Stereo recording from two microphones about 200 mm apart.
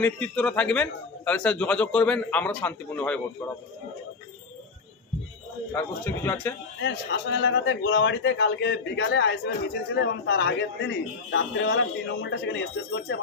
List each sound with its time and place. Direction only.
0.0 s a man's voice: 5° left (ahead or behind)
5.7 s a man's voice: 10° left (ahead or behind)
6.8 s a man's voice: 60° left (ahead or behind)